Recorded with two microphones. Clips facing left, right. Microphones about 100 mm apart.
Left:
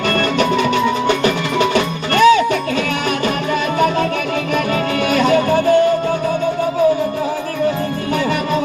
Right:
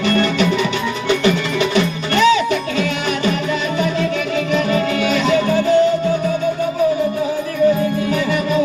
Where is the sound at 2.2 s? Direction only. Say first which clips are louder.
Left 3 dB; 50° left (ahead or behind).